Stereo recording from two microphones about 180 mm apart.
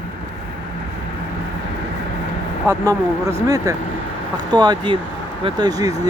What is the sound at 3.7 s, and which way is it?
Speech, 20° right (ahead or behind).